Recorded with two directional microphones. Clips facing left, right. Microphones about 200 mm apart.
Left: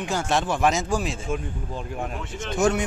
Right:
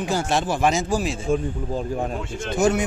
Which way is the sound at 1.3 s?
35° right (ahead or behind).